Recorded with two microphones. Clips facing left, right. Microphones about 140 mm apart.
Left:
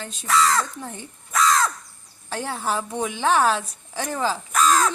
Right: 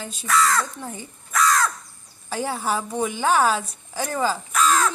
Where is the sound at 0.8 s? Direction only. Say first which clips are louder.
Right 1 dB; centre (ahead or behind).